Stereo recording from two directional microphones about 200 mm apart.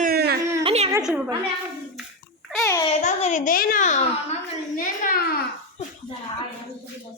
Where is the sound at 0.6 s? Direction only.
30° right (ahead or behind).